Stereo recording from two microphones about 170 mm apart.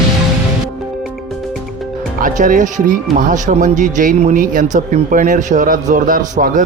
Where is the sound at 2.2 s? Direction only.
50° right (ahead or behind).